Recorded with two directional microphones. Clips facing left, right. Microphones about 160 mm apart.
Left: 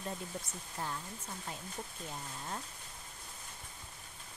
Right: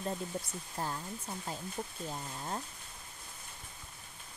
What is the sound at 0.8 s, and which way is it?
Speech, 40° right (ahead or behind).